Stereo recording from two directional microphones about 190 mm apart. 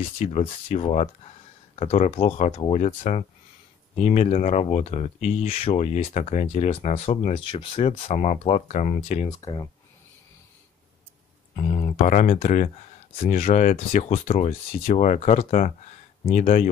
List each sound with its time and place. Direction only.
0.2 s speech: 40° left (ahead or behind)
8.0 s speech: 40° left (ahead or behind)
9.3 s speech: 20° left (ahead or behind)
11.5 s speech: 40° left (ahead or behind)